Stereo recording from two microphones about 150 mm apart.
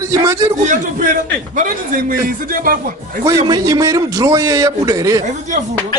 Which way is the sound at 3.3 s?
25° right (ahead or behind).